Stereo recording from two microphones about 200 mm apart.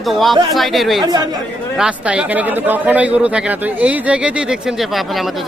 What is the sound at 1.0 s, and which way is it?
Speech, 20° right (ahead or behind).